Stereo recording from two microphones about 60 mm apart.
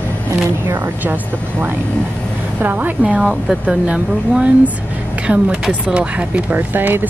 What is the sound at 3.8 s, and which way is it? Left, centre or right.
Speech, centre.